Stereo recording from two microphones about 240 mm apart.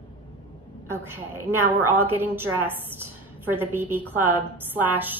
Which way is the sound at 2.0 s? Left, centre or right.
Centre.